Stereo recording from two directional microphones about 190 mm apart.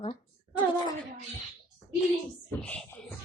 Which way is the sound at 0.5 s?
25° left (ahead or behind).